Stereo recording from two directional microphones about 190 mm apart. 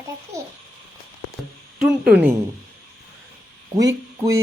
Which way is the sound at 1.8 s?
5° right (ahead or behind).